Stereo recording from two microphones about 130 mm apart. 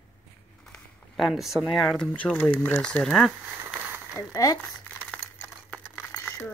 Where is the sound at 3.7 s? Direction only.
15° right (ahead or behind).